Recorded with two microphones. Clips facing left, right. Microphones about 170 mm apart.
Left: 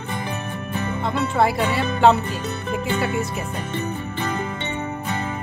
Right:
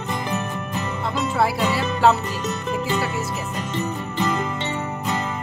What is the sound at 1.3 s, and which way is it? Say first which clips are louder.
Speech: left 2 dB; centre (ahead or behind).